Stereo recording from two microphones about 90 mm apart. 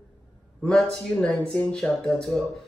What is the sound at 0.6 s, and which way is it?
Speech, 10° left (ahead or behind).